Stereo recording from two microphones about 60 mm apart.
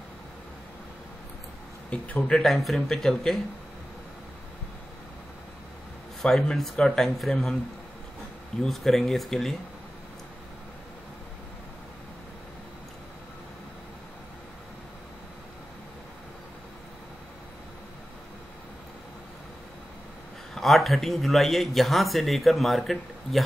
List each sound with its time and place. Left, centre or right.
1.9 s speech: left
2.4 s speech: centre
6.5 s speech: centre
8.6 s speech: centre
20.5 s speech: centre